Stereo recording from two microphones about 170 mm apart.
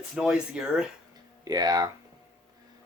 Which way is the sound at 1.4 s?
20° right (ahead or behind).